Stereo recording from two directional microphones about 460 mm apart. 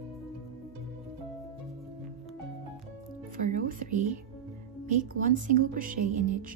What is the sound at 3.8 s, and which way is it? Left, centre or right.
Speech, right.